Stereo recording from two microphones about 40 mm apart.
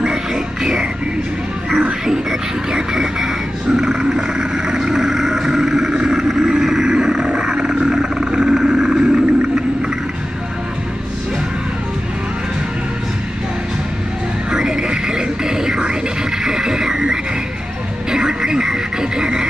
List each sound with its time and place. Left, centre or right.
0.0 s music: centre
2.7 s a sound: centre
14.5 s music: centre